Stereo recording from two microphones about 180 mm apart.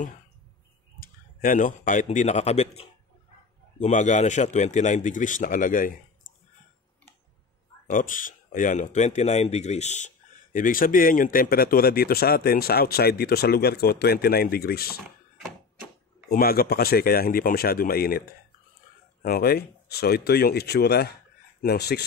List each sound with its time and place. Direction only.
0.9 s a man's voice: 50° left (ahead or behind)
7.9 s speech: 50° left (ahead or behind)
16.3 s speech: 55° left (ahead or behind)
19.2 s speech: 60° left (ahead or behind)